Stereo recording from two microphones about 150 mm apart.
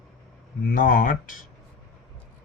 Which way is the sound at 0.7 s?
70° left (ahead or behind).